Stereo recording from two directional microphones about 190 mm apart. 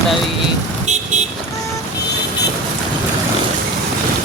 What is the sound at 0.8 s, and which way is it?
Vehicle, 40° right (ahead or behind).